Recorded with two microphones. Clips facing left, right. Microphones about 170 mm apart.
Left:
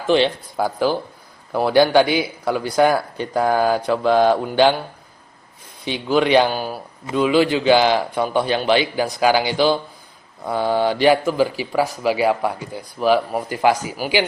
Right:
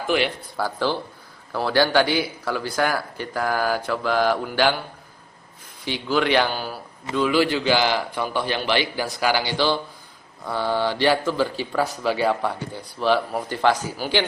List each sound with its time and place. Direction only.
0.1 s speech: 20° left (ahead or behind)
5.8 s speech: 20° left (ahead or behind)